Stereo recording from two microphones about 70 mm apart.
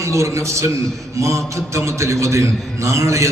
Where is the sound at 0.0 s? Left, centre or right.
Right.